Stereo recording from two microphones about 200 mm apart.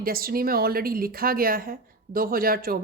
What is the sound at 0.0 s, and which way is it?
A woman's voice, 45° right (ahead or behind).